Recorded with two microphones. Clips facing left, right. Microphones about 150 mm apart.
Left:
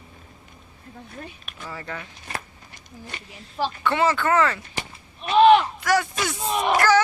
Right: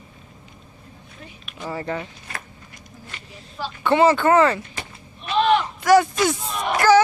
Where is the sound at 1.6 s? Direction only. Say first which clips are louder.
Right 7 dB; 30° right (ahead or behind).